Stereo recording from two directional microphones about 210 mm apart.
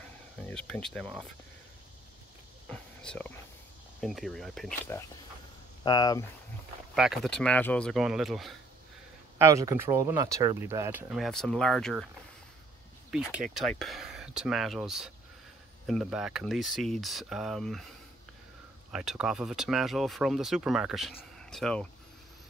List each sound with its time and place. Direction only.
0.4 s speech: 5° left (ahead or behind)
2.7 s speech: 5° left (ahead or behind)
5.9 s speech: 20° left (ahead or behind)
7.0 s speech: centre (ahead or behind)
9.4 s speech: 15° right (ahead or behind); by 12.1 s centre (ahead or behind)
13.1 s speech: centre (ahead or behind)
18.9 s speech: 5° right (ahead or behind)